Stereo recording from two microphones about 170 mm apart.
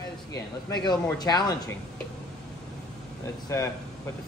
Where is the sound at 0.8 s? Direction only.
25° left (ahead or behind).